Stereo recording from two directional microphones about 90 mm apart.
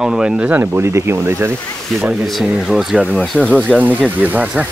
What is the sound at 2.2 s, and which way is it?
Speech, centre (ahead or behind).